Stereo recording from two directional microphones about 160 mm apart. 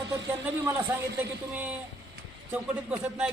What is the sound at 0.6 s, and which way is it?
Speech, 15° right (ahead or behind).